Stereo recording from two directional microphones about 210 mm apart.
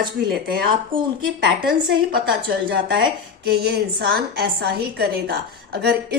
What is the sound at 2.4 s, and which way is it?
A woman's voice, 45° right (ahead or behind).